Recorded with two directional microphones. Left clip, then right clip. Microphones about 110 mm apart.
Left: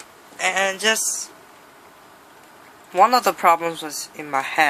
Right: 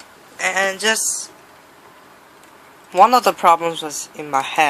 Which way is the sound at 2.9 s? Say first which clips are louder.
Right 4 dB; 15° right (ahead or behind).